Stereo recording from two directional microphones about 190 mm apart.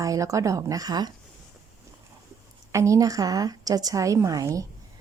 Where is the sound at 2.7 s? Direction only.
15° right (ahead or behind).